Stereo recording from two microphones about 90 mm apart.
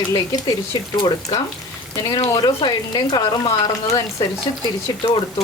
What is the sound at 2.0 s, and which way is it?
Speech, 50° left (ahead or behind).